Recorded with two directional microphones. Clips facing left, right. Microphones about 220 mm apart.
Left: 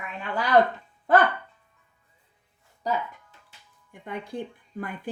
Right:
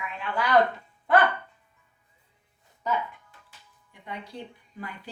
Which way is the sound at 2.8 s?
35° left (ahead or behind).